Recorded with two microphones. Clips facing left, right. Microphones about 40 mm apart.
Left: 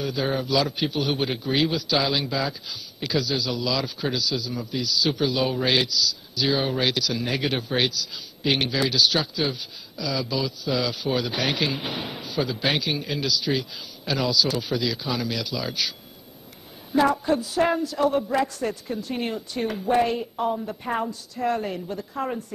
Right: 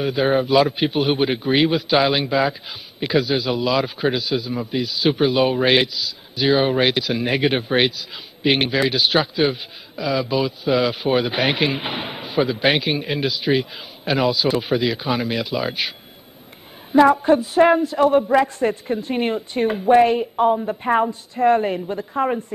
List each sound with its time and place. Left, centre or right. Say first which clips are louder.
0.0 s a man's voice: right 7 dB; right
16.9 s a man's voice: right 7 dB; right